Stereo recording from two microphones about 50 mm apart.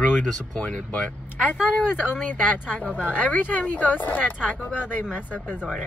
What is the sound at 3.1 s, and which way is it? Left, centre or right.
Speech, left.